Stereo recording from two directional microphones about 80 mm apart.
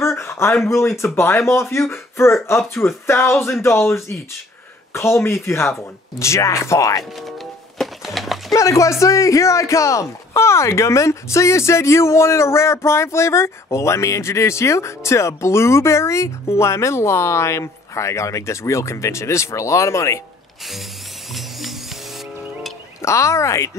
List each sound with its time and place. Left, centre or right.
0.0 s a sound: left
0.7 s speech: left
7.8 s music: centre
8.5 s speech: left
21.4 s music: centre
23.0 s speech: left